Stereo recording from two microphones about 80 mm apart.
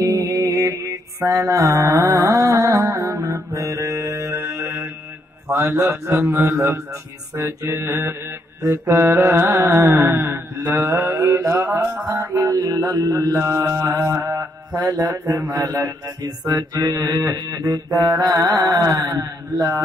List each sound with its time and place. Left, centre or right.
0.0 s mantra: right